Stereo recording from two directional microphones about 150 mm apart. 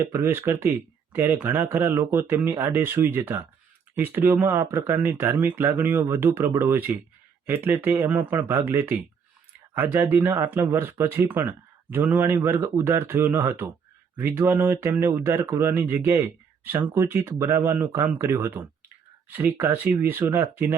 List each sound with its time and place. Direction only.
0.0 s speech: 15° right (ahead or behind)